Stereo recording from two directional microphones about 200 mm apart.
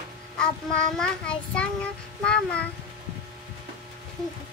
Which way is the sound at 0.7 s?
5° left (ahead or behind).